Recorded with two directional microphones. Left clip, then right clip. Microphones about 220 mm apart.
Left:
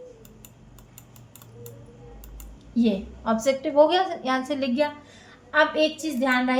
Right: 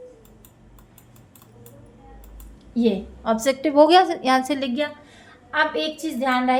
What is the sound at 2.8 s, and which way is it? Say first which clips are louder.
A woman's voice: right 3 dB; 35° right (ahead or behind).